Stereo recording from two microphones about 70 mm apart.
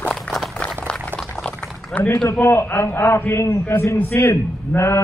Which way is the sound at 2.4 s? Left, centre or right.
Left.